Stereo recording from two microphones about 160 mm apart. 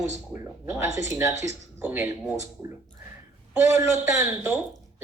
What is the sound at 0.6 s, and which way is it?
A woman's voice, 15° right (ahead or behind).